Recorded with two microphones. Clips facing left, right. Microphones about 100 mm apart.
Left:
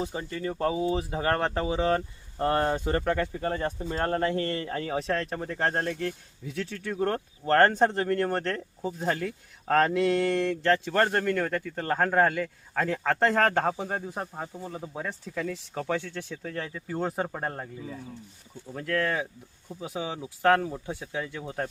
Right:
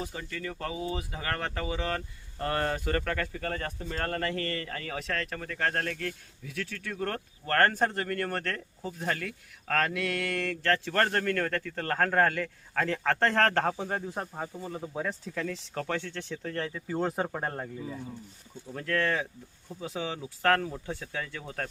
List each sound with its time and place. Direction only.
0.0 s speech: 25° left (ahead or behind)